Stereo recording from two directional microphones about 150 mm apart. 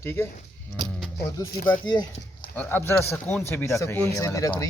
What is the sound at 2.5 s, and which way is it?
Speech, 15° left (ahead or behind).